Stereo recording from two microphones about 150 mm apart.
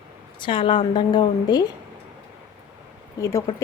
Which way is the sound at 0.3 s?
35° left (ahead or behind).